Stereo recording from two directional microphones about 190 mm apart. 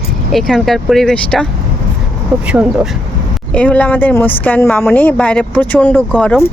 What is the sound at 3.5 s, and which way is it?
Speech, 5° left (ahead or behind).